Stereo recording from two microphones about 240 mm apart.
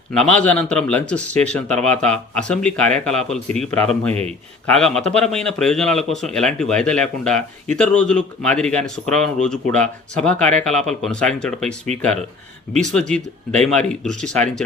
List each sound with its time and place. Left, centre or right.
0.2 s a man's voice: centre
12.8 s a man's voice: centre